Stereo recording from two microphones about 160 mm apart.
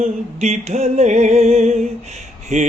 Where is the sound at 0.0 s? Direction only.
45° right (ahead or behind).